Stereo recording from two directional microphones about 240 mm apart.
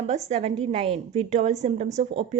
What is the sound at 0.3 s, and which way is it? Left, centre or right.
Speech, right.